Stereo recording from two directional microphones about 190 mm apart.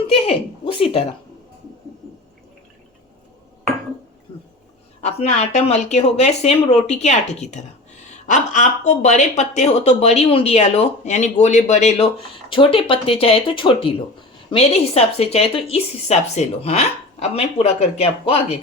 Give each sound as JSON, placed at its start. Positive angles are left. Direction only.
{"t": 0.1, "sound": "speech", "side_deg": 30}
{"t": 4.9, "sound": "speech", "side_deg": 35}